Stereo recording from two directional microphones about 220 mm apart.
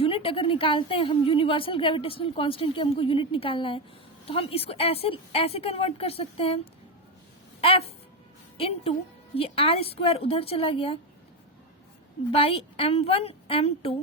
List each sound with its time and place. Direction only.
0.0 s a woman's voice: 25° left (ahead or behind)
7.6 s a woman's voice: 25° left (ahead or behind)
12.3 s a woman's voice: 25° left (ahead or behind)